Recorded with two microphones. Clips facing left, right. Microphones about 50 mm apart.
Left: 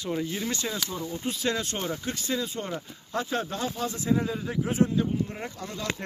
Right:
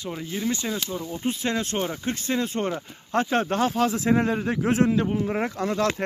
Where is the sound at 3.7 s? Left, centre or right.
Right.